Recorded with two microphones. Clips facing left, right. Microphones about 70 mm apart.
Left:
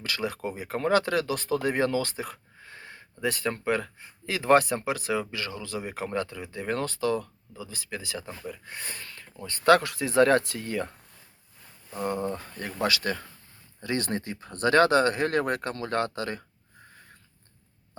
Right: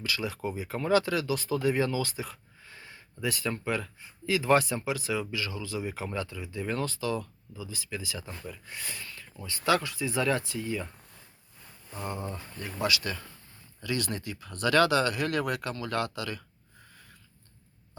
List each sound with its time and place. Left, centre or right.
0.0 s speech: left
11.9 s speech: left